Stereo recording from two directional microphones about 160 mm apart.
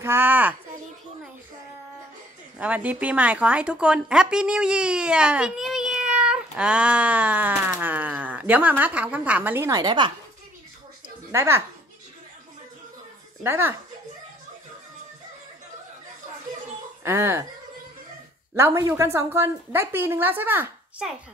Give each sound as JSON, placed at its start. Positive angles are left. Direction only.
{"t": 0.0, "sound": "a sound", "side_deg": -15}
{"t": 2.6, "sound": "a woman's voice", "side_deg": -10}
{"t": 11.3, "sound": "a woman's voice", "side_deg": -15}
{"t": 13.4, "sound": "a woman's voice", "side_deg": -15}
{"t": 17.0, "sound": "a woman's voice", "side_deg": -15}
{"t": 18.5, "sound": "a woman's voice", "side_deg": -15}